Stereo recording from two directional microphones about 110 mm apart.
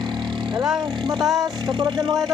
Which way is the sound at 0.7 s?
40° right (ahead or behind).